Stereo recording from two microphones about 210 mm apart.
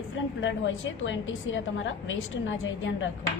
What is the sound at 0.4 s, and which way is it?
A woman's voice, 65° left (ahead or behind).